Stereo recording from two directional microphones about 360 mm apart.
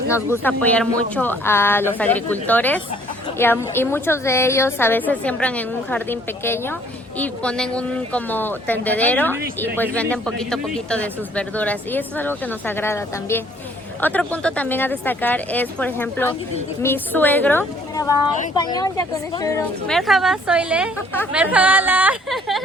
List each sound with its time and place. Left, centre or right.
0.4 s a woman's voice: centre